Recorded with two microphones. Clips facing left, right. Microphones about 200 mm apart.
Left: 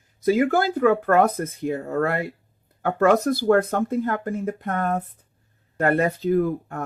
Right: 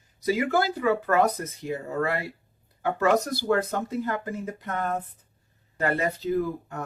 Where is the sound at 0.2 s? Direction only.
50° left (ahead or behind).